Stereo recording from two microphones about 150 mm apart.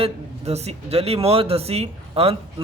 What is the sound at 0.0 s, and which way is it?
A man's voice, 45° right (ahead or behind).